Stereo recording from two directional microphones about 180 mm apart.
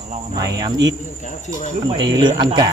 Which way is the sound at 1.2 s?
45° left (ahead or behind).